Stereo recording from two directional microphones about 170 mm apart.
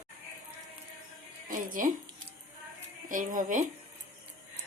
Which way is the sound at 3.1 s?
50° right (ahead or behind).